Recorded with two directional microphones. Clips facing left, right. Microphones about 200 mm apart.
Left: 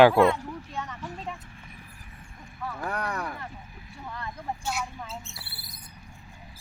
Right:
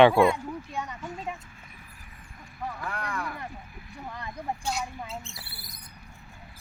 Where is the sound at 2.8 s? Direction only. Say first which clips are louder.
Left 4 dB; 40° left (ahead or behind).